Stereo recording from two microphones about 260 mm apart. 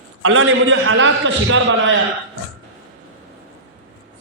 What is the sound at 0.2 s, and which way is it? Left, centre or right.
A man's voice, right.